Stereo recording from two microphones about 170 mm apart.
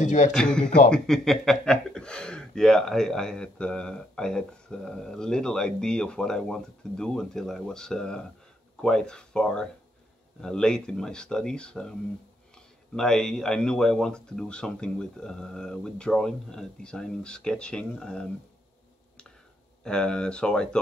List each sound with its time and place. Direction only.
0.0 s a man's voice: 45° left (ahead or behind)
0.3 s speech: 5° left (ahead or behind)
12.9 s speech: 5° left (ahead or behind)
19.8 s speech: 5° left (ahead or behind)